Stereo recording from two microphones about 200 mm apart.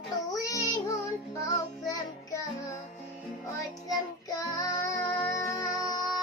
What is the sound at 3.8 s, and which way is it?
Music, 15° left (ahead or behind).